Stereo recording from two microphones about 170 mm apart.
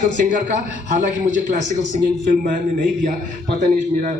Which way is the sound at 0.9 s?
50° right (ahead or behind).